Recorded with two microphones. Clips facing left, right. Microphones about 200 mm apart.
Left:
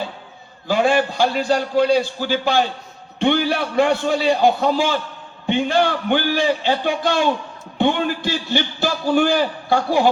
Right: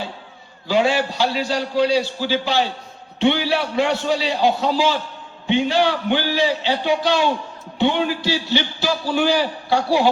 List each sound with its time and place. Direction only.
0.7 s a man's voice: 50° left (ahead or behind)